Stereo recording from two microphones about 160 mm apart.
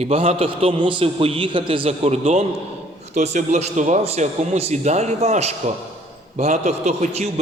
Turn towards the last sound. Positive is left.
turn(degrees=-50)  # may be behind; listen again after turning